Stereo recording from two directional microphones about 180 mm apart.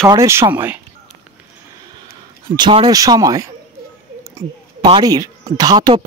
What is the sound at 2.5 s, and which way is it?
Speech, 25° right (ahead or behind).